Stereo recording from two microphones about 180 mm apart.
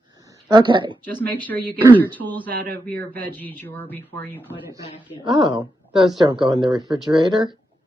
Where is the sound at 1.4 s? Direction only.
10° left (ahead or behind).